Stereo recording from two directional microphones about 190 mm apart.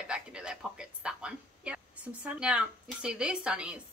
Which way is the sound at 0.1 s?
5° right (ahead or behind).